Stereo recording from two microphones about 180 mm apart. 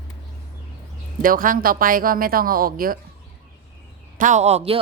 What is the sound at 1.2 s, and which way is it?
A man's voice, 50° right (ahead or behind).